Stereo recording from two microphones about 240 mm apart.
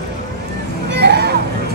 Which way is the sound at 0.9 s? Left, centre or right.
Right.